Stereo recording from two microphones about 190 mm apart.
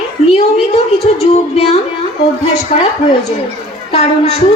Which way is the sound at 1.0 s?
35° left (ahead or behind).